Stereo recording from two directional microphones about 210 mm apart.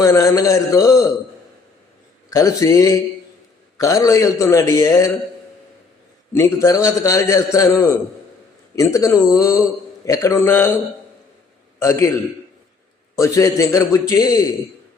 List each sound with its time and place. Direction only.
0.0 s a man's voice: 15° left (ahead or behind)
2.3 s a man's voice: 15° left (ahead or behind)
6.3 s a man's voice: 15° left (ahead or behind)
11.8 s a man's voice: 15° left (ahead or behind)
13.1 s a man's voice: 15° left (ahead or behind)